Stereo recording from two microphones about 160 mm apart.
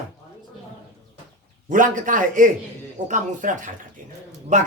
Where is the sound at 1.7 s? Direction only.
55° right (ahead or behind).